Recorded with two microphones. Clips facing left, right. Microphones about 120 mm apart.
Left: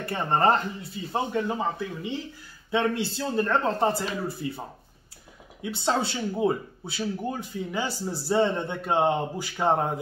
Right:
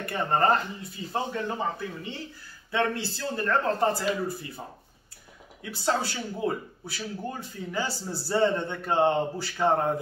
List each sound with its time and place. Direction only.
0.1 s speech: 25° left (ahead or behind)
5.6 s speech: 25° left (ahead or behind)